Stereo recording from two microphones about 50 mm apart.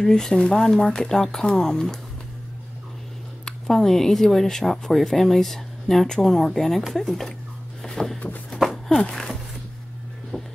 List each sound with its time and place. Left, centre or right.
0.0 s speech: centre
3.4 s speech: centre
7.8 s a sound: centre
9.1 s speech: centre
10.3 s music: centre